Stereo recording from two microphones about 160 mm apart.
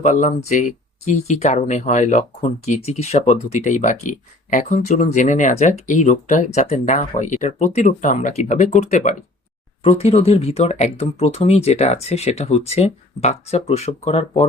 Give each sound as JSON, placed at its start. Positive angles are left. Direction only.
{"t": 0.0, "sound": "speech", "side_deg": 50}